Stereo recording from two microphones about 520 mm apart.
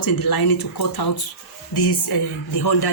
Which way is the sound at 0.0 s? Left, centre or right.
Left.